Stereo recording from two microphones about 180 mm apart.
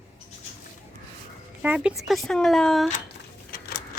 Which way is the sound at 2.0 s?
Centre (ahead or behind).